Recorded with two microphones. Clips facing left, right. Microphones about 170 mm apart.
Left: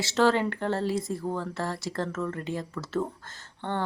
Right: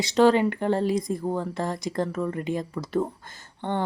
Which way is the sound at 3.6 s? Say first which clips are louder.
Right 3 dB; 15° right (ahead or behind).